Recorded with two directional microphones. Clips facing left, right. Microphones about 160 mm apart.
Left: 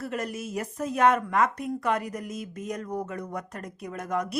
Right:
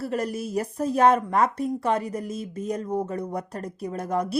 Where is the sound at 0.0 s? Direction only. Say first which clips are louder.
Right 4 dB; 35° right (ahead or behind).